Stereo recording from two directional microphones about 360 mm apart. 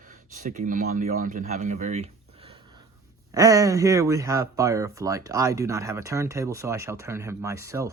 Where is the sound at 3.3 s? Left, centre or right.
Centre.